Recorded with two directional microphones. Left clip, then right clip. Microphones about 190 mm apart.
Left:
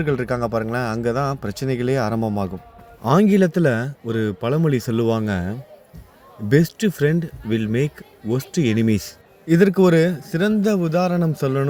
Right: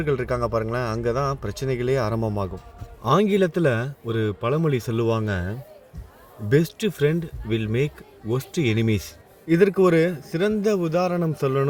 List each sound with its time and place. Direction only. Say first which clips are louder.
0.0 s speech: left 2 dB; 40° left (ahead or behind)